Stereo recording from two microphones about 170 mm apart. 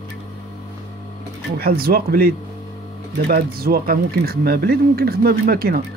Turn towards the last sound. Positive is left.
turn(degrees=-65)  # may be behind; listen again after turning